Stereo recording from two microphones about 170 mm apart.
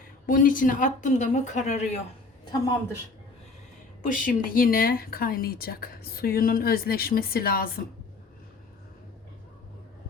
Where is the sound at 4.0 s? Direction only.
50° left (ahead or behind).